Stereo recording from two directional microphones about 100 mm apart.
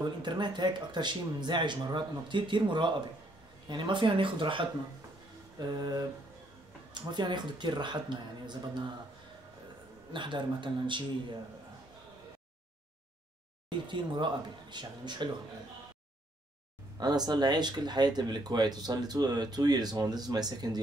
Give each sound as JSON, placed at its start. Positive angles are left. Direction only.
{"t": 0.2, "sound": "speech", "side_deg": -50}
{"t": 5.6, "sound": "speech", "side_deg": -45}
{"t": 10.1, "sound": "speech", "side_deg": -55}
{"t": 13.7, "sound": "speech", "side_deg": -50}
{"t": 17.0, "sound": "speech", "side_deg": -45}